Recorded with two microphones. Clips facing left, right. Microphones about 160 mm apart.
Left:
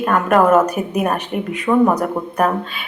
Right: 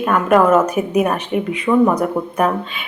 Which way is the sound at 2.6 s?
40° left (ahead or behind).